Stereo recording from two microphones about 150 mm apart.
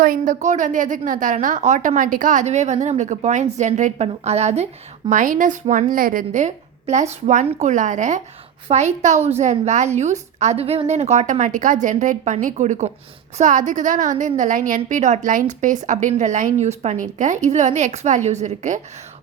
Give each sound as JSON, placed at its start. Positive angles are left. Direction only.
{"t": 0.0, "sound": "a woman's voice", "side_deg": -60}